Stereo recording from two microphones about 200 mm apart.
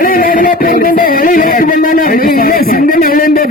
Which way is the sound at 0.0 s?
45° left (ahead or behind).